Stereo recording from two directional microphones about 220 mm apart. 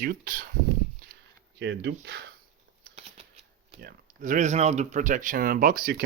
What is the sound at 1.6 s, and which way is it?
Speech, 55° right (ahead or behind).